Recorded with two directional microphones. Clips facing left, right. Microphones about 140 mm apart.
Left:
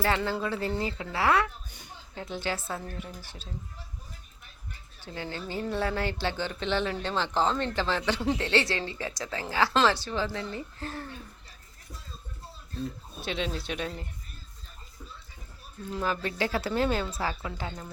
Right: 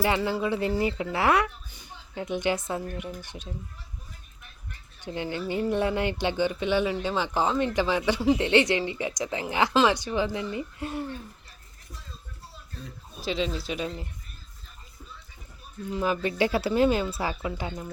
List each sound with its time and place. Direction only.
0.0 s speech: 10° right (ahead or behind)
4.9 s speech: 20° right (ahead or behind)
13.2 s speech: centre (ahead or behind)
15.9 s speech: 10° right (ahead or behind)